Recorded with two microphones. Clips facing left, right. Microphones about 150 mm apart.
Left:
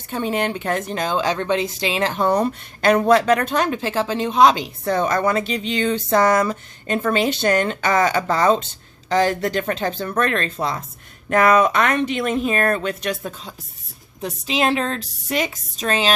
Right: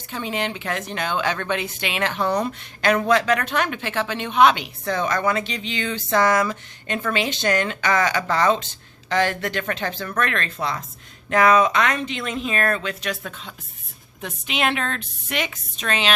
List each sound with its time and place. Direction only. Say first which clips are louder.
0.1 s speech: left 5 dB; 45° left (ahead or behind)
11.3 s speech: left 1 dB; 50° left (ahead or behind)
14.2 s speech: left 4 dB; 35° left (ahead or behind)